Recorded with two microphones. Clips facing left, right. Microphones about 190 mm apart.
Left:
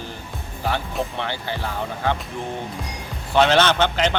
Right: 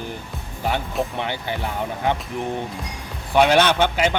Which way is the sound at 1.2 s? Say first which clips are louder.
Right 1 dB; 15° right (ahead or behind).